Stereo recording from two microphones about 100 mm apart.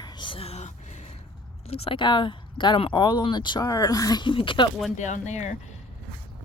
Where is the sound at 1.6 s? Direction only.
85° left.